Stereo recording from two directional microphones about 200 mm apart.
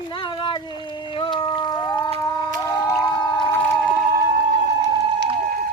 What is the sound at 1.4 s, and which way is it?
Music, 25° left (ahead or behind).